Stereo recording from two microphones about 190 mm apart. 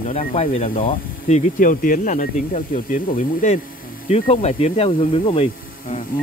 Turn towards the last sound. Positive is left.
turn(degrees=35)  # may be behind; listen again after turning